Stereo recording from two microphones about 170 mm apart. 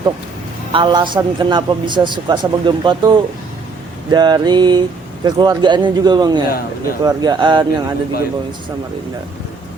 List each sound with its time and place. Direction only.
0.7 s a man's voice: 30° right (ahead or behind)